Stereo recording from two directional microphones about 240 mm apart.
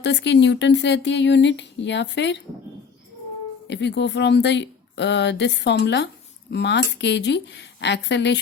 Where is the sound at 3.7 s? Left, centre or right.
Left.